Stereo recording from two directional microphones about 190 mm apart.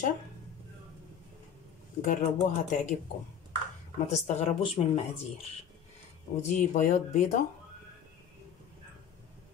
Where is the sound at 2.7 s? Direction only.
40° left (ahead or behind).